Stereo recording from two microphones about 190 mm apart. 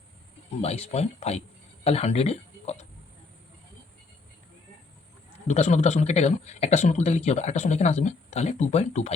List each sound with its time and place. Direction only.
0.6 s speech: 35° left (ahead or behind)
5.5 s a man's voice: 40° left (ahead or behind)